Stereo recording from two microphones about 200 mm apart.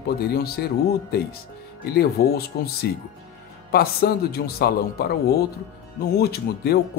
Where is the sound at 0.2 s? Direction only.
50° left (ahead or behind).